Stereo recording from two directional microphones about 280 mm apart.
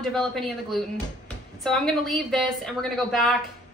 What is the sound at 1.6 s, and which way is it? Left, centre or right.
A woman's voice, centre.